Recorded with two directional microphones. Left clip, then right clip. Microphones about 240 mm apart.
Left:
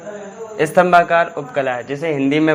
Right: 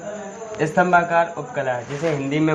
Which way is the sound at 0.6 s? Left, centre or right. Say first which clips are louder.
Left 5 dB; left.